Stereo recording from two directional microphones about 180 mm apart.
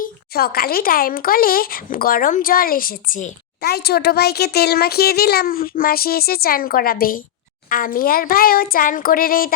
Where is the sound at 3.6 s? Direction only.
60° left (ahead or behind).